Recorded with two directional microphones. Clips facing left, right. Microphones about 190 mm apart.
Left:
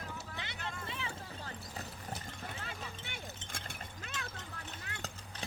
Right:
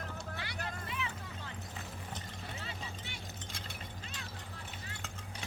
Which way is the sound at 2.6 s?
55° left (ahead or behind).